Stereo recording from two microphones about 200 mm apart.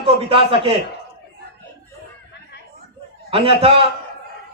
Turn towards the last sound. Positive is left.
turn(degrees=-30)  # may be behind; listen again after turning